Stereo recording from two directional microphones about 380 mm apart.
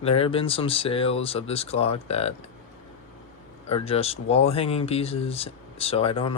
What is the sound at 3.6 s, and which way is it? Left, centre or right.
Speech, centre.